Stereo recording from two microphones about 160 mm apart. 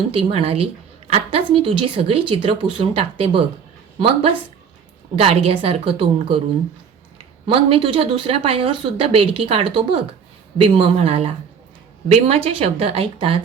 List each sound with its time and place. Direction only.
0.2 s speech: 35° right (ahead or behind)
7.4 s speech: 35° right (ahead or behind)